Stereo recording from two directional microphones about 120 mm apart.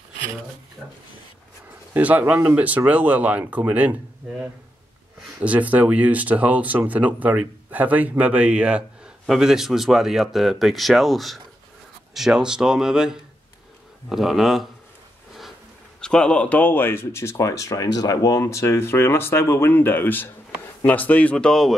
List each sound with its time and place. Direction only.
2.0 s speech: 15° right (ahead or behind)
5.4 s speech: 10° right (ahead or behind)
16.0 s a man's voice: 5° left (ahead or behind)